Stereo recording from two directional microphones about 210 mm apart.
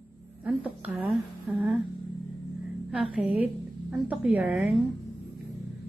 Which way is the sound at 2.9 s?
5° right (ahead or behind).